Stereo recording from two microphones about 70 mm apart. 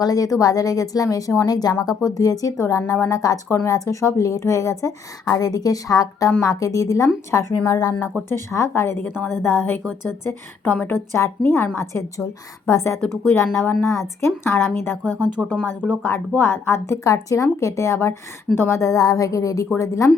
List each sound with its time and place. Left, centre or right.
0.0 s speech: left
1.8 s speech: left
5.4 s a woman's voice: left
11.1 s a woman's voice: left
12.1 s a woman's voice: left
15.4 s speech: centre
16.0 s a woman's voice: left
17.0 s speech: left